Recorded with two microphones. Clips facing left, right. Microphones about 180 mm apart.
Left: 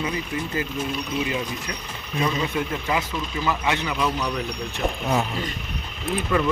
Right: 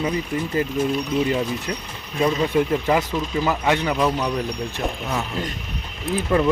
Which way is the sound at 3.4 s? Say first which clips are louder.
Right 3 dB; 40° right (ahead or behind).